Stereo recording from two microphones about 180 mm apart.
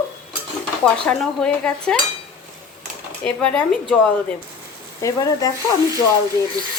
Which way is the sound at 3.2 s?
5° left (ahead or behind).